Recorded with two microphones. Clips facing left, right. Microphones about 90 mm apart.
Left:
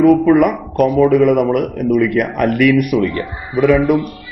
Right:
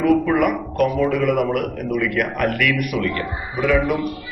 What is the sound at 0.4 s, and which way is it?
A man's voice, 30° left (ahead or behind).